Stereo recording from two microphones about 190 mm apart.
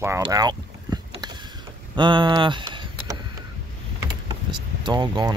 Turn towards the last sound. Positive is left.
turn(degrees=-25)  # may be behind; listen again after turning